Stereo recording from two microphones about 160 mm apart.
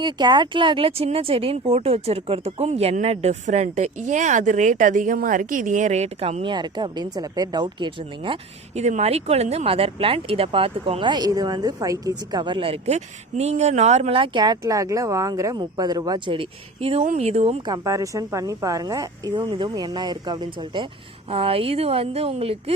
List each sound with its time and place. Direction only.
0.0 s speech: 30° right (ahead or behind)
8.8 s speech: 45° right (ahead or behind)
17.7 s speech: 20° right (ahead or behind); by 22.7 s 40° right (ahead or behind)